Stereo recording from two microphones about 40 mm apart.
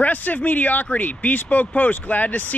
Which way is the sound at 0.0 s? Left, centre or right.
Left.